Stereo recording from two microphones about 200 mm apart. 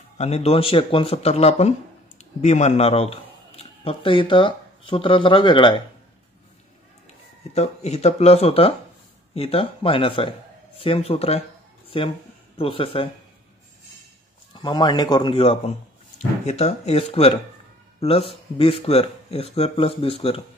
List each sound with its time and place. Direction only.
0.2 s speech: 30° left (ahead or behind)
7.5 s speech: 30° left (ahead or behind)
14.5 s speech: 20° left (ahead or behind)